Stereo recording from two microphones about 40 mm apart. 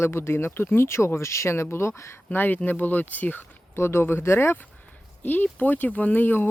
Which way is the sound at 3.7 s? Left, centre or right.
Left.